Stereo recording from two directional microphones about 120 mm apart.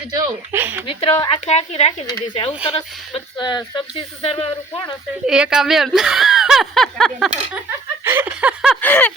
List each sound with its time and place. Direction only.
0.5 s speech: 15° right (ahead or behind)
0.9 s speech: 45° left (ahead or behind)
1.5 s speech: 60° left (ahead or behind)
2.2 s speech: 45° left (ahead or behind)
4.2 s speech: 55° left (ahead or behind)
5.2 s speech: 5° right (ahead or behind)
8.0 s a sound: 20° right (ahead or behind)
8.7 s a sound: 15° left (ahead or behind)